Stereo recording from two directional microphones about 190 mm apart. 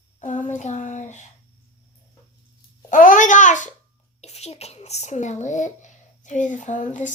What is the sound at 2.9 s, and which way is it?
Babbling, 45° left (ahead or behind).